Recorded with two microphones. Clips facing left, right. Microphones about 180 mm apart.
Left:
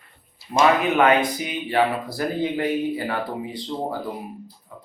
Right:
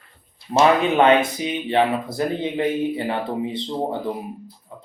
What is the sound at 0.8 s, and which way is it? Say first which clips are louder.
Speech: right 2 dB; 25° right (ahead or behind).